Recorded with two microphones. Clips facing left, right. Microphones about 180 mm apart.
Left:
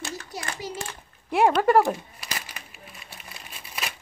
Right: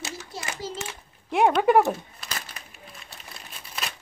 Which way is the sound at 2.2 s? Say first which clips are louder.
Even; 10° left (ahead or behind).